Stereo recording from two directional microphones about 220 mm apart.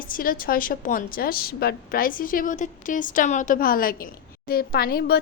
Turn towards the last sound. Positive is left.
turn(degrees=45)  # may be behind; listen again after turning